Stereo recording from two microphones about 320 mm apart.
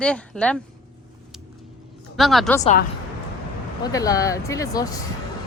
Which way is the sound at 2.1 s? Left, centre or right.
Centre.